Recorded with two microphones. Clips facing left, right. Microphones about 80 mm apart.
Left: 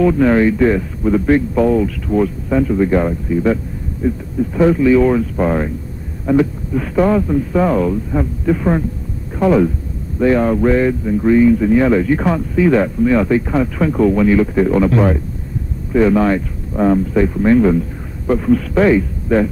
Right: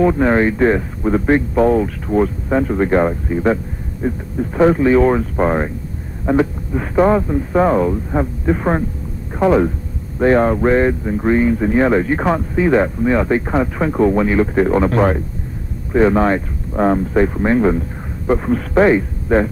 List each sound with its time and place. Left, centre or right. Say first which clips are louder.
0.0 s speech: left 2 dB; right